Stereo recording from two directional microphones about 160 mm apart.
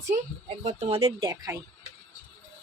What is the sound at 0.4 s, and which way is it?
Speech, 40° right (ahead or behind).